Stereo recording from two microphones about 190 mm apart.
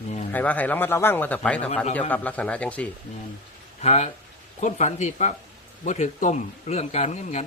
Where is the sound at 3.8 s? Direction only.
35° left (ahead or behind).